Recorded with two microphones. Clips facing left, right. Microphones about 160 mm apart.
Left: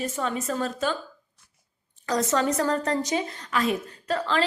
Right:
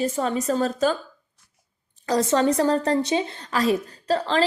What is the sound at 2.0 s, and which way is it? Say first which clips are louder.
A woman's voice: right 4 dB; 30° right (ahead or behind).